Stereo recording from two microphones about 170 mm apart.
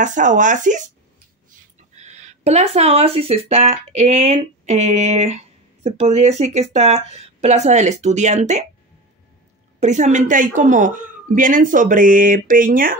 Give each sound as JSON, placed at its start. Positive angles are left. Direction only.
{"t": 0.0, "sound": "speech", "side_deg": -50}
{"t": 2.0, "sound": "speech", "side_deg": -40}
{"t": 9.8, "sound": "speech", "side_deg": -45}